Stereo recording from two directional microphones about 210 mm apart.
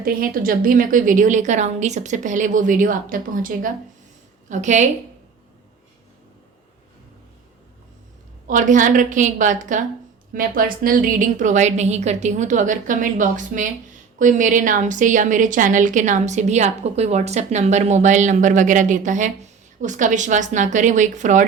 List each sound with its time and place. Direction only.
0.0 s a woman's voice: 45° right (ahead or behind)
8.4 s a woman's voice: 40° right (ahead or behind)